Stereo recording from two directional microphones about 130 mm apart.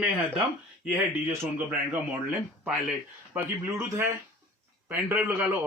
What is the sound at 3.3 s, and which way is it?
Speech, 15° right (ahead or behind).